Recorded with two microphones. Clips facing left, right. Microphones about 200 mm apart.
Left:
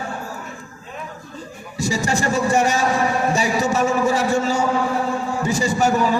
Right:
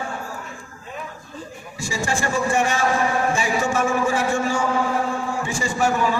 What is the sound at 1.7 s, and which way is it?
A man's voice, 40° left (ahead or behind).